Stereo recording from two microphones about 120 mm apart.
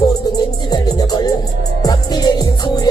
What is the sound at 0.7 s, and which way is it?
Music, 35° left (ahead or behind).